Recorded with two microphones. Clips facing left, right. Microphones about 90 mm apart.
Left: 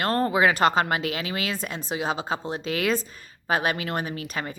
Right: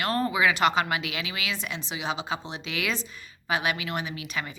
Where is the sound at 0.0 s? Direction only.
40° left (ahead or behind).